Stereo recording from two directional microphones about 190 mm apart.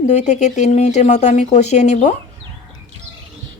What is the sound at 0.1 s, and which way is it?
A woman's voice, 40° left (ahead or behind).